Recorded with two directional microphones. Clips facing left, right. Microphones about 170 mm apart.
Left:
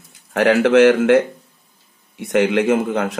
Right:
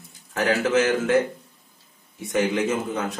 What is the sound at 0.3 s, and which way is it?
A man's voice, 70° left (ahead or behind).